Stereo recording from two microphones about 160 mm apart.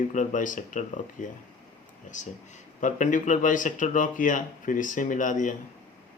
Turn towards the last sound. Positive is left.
turn(degrees=55)  # may be behind; listen again after turning